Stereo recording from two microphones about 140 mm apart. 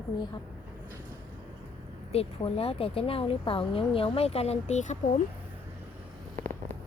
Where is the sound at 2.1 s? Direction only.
45° left (ahead or behind); by 5.2 s 60° left (ahead or behind).